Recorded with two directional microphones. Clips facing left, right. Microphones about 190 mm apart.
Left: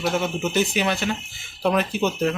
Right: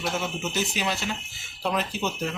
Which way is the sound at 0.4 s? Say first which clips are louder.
Left 7 dB; 55° left (ahead or behind).